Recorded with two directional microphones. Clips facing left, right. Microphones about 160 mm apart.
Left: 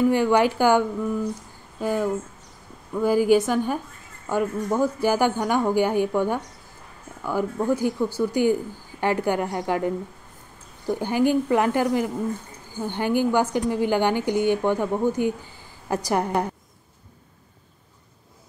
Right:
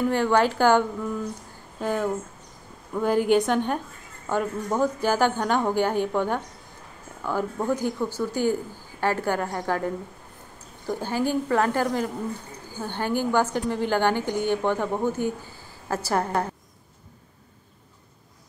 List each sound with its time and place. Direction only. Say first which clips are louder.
0.1 s a woman's voice: left 2 dB; 15° left (ahead or behind)
7.5 s a woman's voice: left 3 dB; 10° left (ahead or behind)